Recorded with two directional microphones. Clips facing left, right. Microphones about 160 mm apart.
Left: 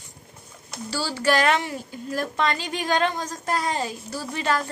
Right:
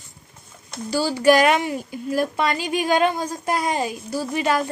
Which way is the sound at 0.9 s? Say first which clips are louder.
Right 7 dB; 15° right (ahead or behind).